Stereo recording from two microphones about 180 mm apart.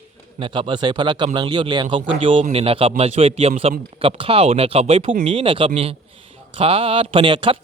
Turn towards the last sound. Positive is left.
turn(degrees=-30)  # may be behind; listen again after turning